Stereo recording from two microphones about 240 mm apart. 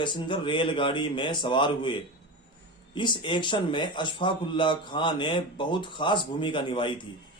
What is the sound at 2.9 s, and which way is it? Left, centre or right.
A man's voice, centre.